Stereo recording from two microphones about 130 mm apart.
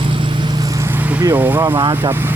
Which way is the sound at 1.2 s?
15° right (ahead or behind).